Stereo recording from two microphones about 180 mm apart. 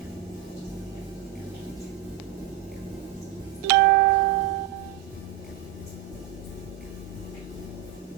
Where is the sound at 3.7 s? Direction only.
60° right (ahead or behind).